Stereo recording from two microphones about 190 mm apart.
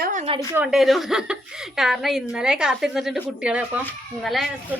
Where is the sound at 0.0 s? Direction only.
45° right (ahead or behind).